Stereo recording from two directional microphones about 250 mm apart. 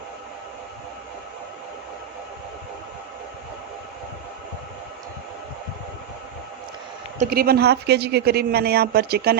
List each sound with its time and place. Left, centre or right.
7.2 s speech: right